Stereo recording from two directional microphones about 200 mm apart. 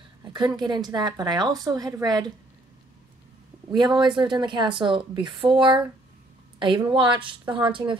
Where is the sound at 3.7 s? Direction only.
20° right (ahead or behind).